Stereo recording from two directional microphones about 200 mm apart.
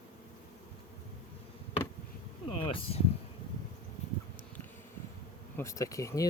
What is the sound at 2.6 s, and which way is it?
Speech, 25° left (ahead or behind).